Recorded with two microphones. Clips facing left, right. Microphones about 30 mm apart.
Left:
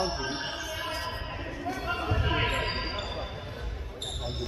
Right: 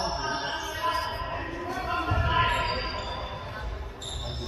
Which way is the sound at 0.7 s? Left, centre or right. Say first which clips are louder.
Right 5 dB; centre.